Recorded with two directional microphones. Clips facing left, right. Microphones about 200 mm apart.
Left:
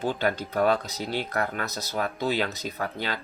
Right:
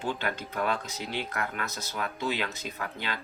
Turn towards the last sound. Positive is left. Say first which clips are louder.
# left 5 dB
turn(degrees=35)  # may be behind; listen again after turning